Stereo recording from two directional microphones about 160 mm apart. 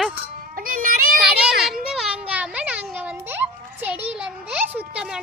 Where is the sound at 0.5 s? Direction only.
60° right (ahead or behind).